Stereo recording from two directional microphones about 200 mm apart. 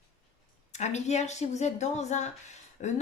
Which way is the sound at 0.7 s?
35° left (ahead or behind).